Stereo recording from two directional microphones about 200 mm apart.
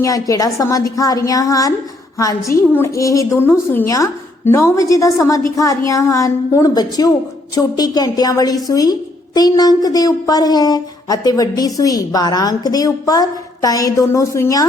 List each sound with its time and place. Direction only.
0.0 s a woman's voice: 15° left (ahead or behind)